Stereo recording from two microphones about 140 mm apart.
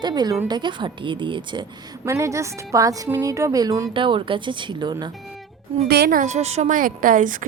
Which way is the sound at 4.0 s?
35° right (ahead or behind).